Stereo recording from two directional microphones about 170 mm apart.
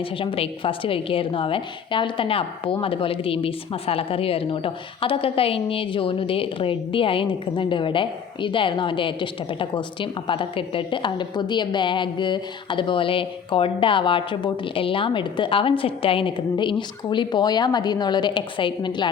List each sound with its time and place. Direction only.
0.0 s a woman's voice: 30° left (ahead or behind)